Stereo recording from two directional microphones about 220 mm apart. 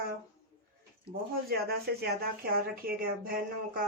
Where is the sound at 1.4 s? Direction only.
45° right (ahead or behind).